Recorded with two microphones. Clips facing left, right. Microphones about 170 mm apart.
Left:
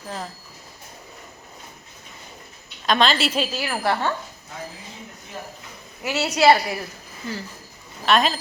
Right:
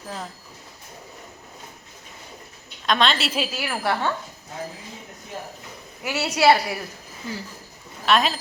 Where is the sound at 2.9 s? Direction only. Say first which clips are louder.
Left 2 dB; centre (ahead or behind).